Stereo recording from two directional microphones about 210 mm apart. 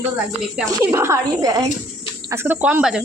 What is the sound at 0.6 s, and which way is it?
A woman's voice, 15° right (ahead or behind).